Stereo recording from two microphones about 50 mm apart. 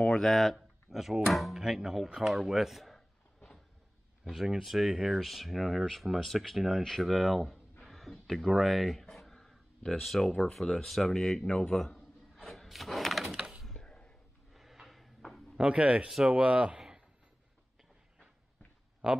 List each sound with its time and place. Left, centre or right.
0.1 s speech: centre
0.6 s a sound: centre
1.2 s speech: centre
4.3 s speech: centre
13.2 s wood: centre
13.7 s a sound: centre
14.5 s drawer open or close: centre
15.5 s speech: right
16.1 s speech: centre
16.3 s speech: right
16.7 s a sound: centre